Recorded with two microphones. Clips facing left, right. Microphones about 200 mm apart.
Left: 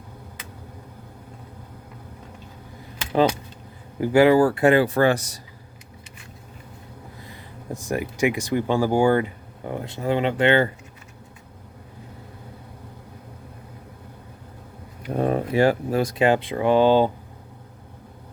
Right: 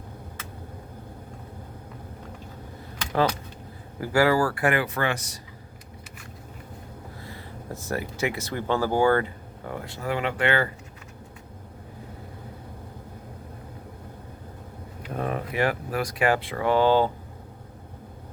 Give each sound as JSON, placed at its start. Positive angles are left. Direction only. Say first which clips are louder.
{"t": 3.0, "sound": "keys jangling", "louder": "left 4 dB", "side_deg": 10}
{"t": 4.0, "sound": "speech", "louder": "left 6 dB", "side_deg": 20}
{"t": 7.3, "sound": "speech", "louder": "left 4 dB", "side_deg": 15}
{"t": 15.1, "sound": "speech", "louder": "left 7 dB", "side_deg": 30}